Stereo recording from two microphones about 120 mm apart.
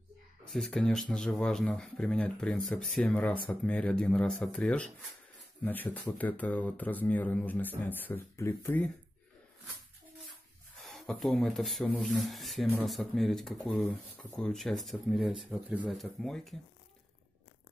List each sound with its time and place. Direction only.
0.5 s speech: centre (ahead or behind); by 8.8 s 20° left (ahead or behind)
10.8 s speech: centre (ahead or behind)
15.5 s speech: 10° right (ahead or behind)
15.9 s speech: centre (ahead or behind)